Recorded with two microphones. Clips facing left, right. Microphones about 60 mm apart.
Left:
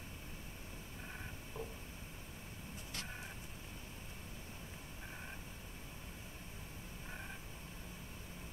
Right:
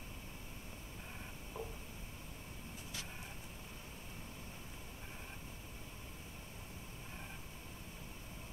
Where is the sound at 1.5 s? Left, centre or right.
Centre.